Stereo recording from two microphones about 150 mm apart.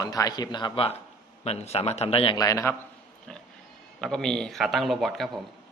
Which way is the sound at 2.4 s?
20° left (ahead or behind).